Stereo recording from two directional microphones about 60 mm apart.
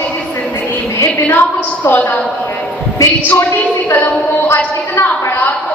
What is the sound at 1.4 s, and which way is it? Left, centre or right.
Speech, left.